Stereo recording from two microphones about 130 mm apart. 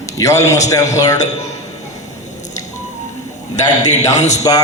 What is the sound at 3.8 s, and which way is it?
Speech, 65° left (ahead or behind).